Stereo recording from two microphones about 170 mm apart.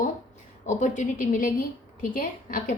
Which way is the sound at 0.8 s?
50° left (ahead or behind).